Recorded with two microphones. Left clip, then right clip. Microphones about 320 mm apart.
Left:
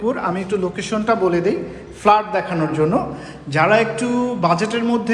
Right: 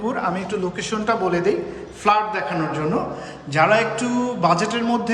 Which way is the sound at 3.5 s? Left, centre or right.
Centre.